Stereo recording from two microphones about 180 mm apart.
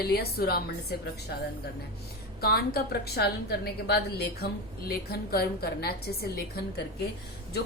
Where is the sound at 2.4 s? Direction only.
60° left (ahead or behind).